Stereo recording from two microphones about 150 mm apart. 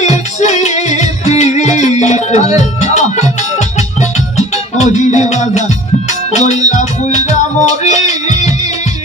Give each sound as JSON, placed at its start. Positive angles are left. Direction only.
{"t": 0.0, "sound": "music", "side_deg": 50}